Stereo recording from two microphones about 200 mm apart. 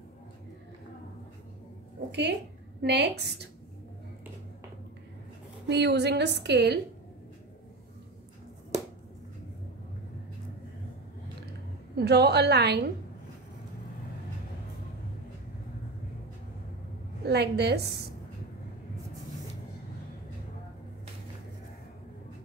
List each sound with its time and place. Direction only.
2.0 s a woman's voice: 55° right (ahead or behind)
5.7 s a woman's voice: 60° right (ahead or behind)
12.0 s a woman's voice: 55° right (ahead or behind)
17.2 s a woman's voice: 55° right (ahead or behind)